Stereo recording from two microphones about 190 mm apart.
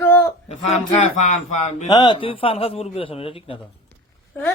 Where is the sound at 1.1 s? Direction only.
35° left (ahead or behind).